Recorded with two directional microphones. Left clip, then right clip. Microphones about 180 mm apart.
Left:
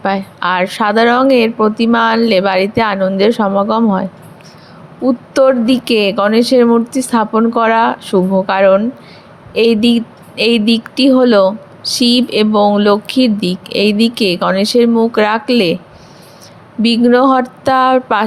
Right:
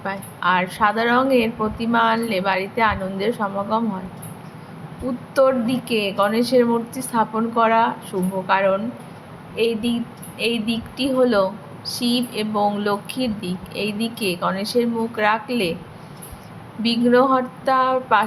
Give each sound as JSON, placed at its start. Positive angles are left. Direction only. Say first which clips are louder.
{"t": 0.0, "sound": "speech", "louder": "left 7 dB", "side_deg": 50}
{"t": 5.0, "sound": "speech", "louder": "left 7 dB", "side_deg": 45}
{"t": 16.8, "sound": "speech", "louder": "left 7 dB", "side_deg": 45}